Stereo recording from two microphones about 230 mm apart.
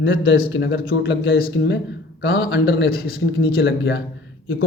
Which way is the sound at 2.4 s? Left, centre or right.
Left.